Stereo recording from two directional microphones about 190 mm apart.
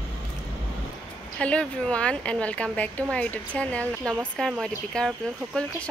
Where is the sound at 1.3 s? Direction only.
5° left (ahead or behind).